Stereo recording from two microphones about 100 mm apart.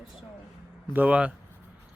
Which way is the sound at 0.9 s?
15° right (ahead or behind).